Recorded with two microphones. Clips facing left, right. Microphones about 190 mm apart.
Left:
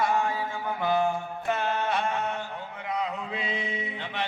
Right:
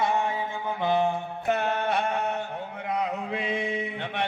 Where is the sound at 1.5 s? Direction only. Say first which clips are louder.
Right 2 dB; 60° right (ahead or behind).